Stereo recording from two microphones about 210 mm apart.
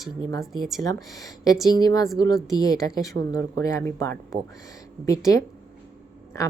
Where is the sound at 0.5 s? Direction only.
Centre (ahead or behind).